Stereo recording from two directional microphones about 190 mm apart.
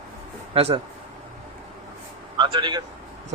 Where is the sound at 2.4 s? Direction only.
25° right (ahead or behind).